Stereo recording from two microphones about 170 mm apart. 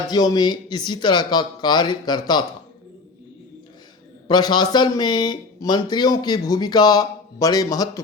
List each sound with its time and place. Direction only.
0.1 s speech: 25° left (ahead or behind)
4.3 s speech: 25° left (ahead or behind)